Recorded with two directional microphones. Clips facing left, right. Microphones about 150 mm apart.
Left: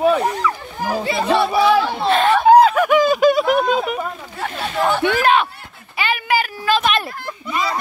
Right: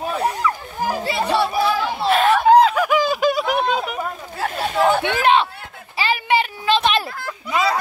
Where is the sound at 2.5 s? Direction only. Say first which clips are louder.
Left 3 dB; 5° left (ahead or behind).